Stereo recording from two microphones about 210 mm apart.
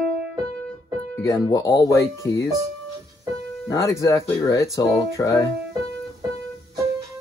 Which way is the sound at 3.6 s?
15° left (ahead or behind).